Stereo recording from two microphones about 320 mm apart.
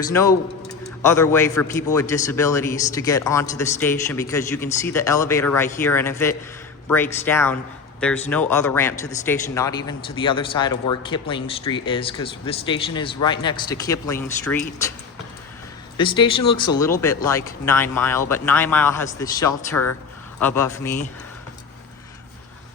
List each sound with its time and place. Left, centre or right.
0.1 s a man's voice: centre
16.0 s a man's voice: centre